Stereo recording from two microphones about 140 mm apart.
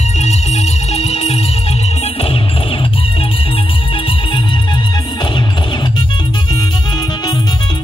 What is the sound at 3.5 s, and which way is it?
Music, 40° left (ahead or behind).